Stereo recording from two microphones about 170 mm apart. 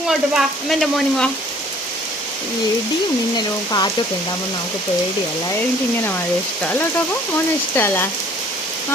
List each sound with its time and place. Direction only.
0.1 s frying: centre (ahead or behind)
3.3 s speech: 25° left (ahead or behind)
7.8 s rain on surface: 10° left (ahead or behind)